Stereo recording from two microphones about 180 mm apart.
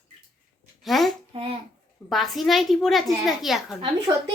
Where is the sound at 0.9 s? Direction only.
Centre (ahead or behind).